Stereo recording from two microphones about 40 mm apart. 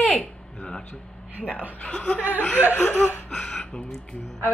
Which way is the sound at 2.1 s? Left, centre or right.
Right.